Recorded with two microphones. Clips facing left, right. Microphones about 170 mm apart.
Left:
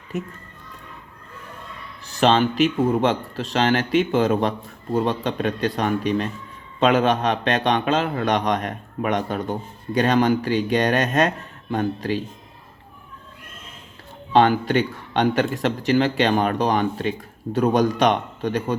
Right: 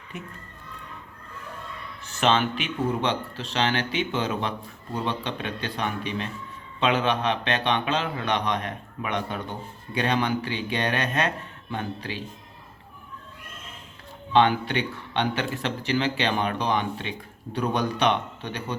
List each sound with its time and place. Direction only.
2.0 s a man's voice: 35° left (ahead or behind)
14.3 s a man's voice: 40° left (ahead or behind)